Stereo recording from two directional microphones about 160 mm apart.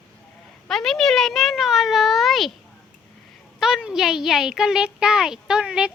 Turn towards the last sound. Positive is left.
turn(degrees=-5)  # may be behind; listen again after turning